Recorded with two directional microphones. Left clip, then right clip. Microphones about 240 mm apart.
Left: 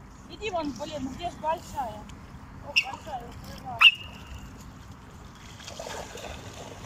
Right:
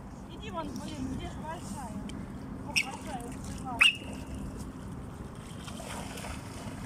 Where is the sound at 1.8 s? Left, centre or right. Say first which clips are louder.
Left 10 dB; left.